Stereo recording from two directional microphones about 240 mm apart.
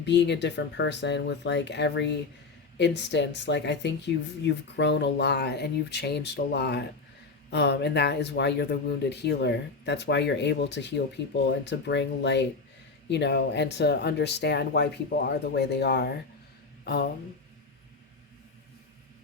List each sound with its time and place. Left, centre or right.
0.0 s speech: left